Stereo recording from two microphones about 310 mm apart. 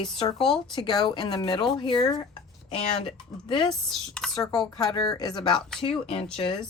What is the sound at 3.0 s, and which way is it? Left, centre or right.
Speech, centre.